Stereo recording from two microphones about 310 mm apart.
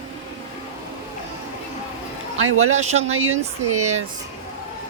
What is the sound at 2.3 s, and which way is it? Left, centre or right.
Speech, right.